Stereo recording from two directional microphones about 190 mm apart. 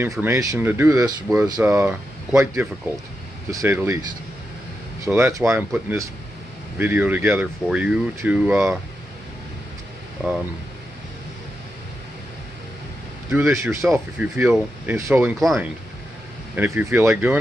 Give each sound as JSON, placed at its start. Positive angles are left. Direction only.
{"t": 0.2, "sound": "speech", "side_deg": -15}
{"t": 5.0, "sound": "speech", "side_deg": -15}
{"t": 13.3, "sound": "speech", "side_deg": -15}
{"t": 15.3, "sound": "speech", "side_deg": 0}
{"t": 16.5, "sound": "speech", "side_deg": -10}